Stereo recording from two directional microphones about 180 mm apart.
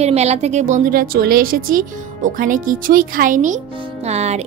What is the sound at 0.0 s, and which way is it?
A woman's voice, 35° right (ahead or behind).